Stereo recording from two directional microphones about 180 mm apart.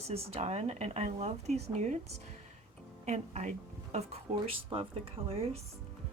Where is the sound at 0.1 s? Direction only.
35° right (ahead or behind).